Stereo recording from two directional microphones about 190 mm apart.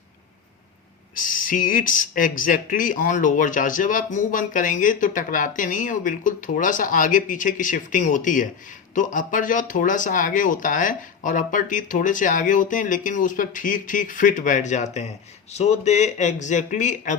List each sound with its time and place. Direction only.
1.1 s speech: 45° left (ahead or behind)